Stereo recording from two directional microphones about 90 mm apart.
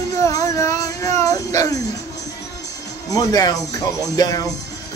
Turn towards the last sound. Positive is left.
turn(degrees=45)  # may be behind; listen again after turning